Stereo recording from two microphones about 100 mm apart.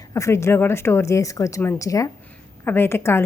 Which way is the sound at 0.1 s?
30° left (ahead or behind).